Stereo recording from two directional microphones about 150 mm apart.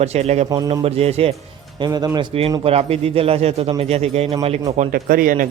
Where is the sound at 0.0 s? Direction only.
45° right (ahead or behind).